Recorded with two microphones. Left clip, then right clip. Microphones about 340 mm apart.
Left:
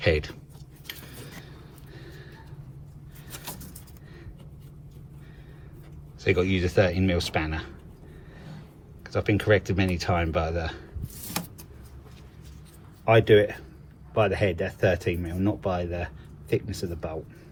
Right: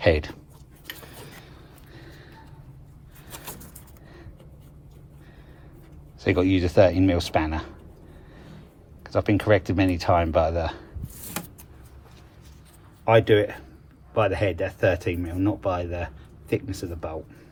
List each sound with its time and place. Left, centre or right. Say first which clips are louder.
0.0 s speech: right 3 dB; centre
2.0 s a sound: even; centre
6.1 s speech: right 2 dB; centre
9.0 s speech: right 2 dB; centre
13.1 s speech: even; centre